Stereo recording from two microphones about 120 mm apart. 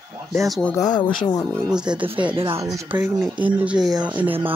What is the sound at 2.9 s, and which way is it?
Speech, 10° right (ahead or behind).